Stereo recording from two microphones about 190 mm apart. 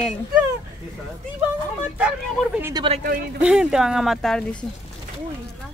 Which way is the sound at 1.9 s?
5° right (ahead or behind).